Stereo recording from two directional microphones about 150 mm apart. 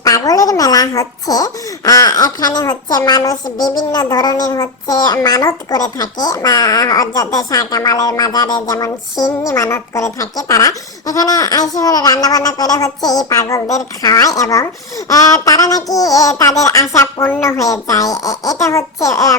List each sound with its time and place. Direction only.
0.0 s speech: 25° left (ahead or behind)